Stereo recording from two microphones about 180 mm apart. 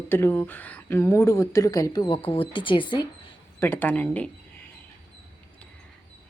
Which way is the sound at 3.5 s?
10° left (ahead or behind).